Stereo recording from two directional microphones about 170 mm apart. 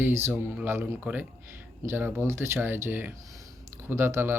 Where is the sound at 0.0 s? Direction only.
15° right (ahead or behind).